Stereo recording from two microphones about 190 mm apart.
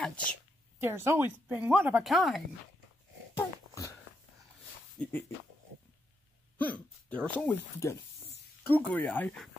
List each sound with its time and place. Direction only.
0.0 s speech: 5° left (ahead or behind)
0.7 s speech: 10° right (ahead or behind)
3.3 s a sound: 15° left (ahead or behind)
4.9 s speech: 5° left (ahead or behind)
6.6 s speech: 5° left (ahead or behind)